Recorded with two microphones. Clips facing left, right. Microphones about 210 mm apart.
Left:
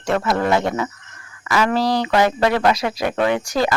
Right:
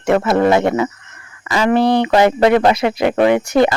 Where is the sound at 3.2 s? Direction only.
20° right (ahead or behind).